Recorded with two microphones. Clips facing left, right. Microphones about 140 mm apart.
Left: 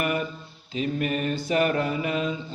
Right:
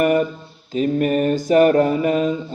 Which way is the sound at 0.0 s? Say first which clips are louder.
Right 10 dB; 45° right (ahead or behind).